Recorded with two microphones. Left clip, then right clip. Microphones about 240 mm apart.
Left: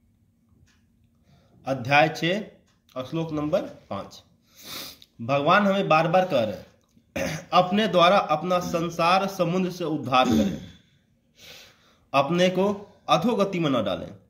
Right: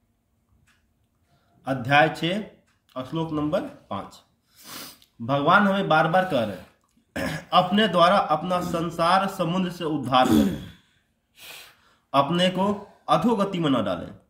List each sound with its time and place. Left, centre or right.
1.6 s a man's voice: centre
10.2 s a man's voice: right
11.3 s a sound: right
12.1 s a man's voice: centre